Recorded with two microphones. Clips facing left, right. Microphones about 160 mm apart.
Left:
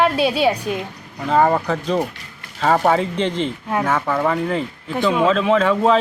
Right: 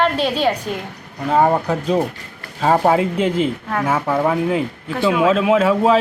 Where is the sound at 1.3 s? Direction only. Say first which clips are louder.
Right 1 dB; 5° right (ahead or behind).